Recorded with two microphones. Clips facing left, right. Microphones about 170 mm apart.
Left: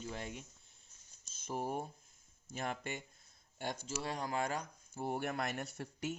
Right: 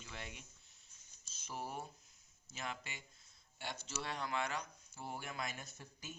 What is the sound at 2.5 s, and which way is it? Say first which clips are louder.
Speech: left 7 dB; 50° left (ahead or behind).